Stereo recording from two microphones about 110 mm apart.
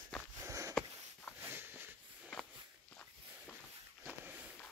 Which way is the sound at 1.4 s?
20° right (ahead or behind).